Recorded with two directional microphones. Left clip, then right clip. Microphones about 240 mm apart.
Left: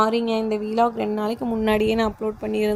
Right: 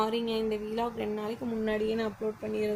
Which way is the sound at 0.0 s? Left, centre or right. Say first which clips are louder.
Left 9 dB; left.